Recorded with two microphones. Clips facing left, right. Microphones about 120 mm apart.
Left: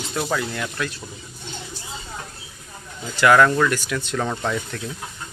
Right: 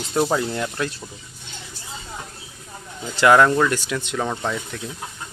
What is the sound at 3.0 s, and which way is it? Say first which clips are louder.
Speech: right 1 dB; 25° right (ahead or behind).